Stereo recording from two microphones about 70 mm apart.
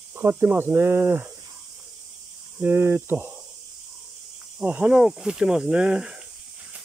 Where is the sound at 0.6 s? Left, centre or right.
Right.